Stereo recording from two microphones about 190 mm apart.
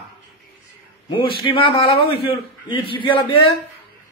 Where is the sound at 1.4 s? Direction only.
25° left (ahead or behind).